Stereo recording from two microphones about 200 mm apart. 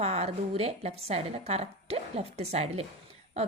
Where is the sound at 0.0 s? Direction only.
30° right (ahead or behind).